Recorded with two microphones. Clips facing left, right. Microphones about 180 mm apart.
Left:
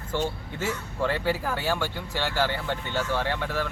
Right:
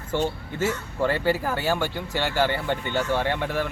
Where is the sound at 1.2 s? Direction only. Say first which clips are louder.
Right 3 dB; centre (ahead or behind).